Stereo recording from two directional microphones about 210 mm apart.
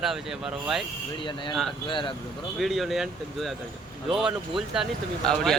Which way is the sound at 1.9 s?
25° left (ahead or behind).